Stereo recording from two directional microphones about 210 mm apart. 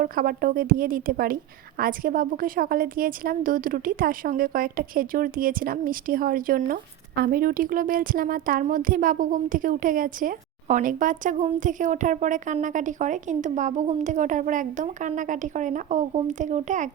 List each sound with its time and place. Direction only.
0.0 s a woman's voice: 40° right (ahead or behind)